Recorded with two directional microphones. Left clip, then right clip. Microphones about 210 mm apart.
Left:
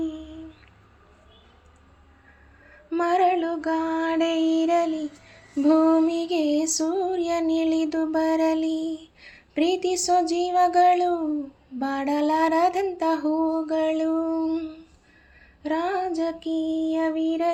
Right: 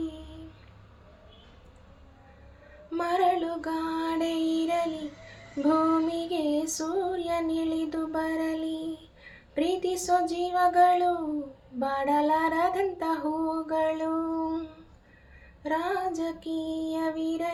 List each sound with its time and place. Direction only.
2.9 s music: 30° left (ahead or behind)
6.1 s female singing: 35° left (ahead or behind)
9.6 s speech: 35° left (ahead or behind)
13.7 s a sound: 40° left (ahead or behind)
15.6 s child singing: 35° left (ahead or behind)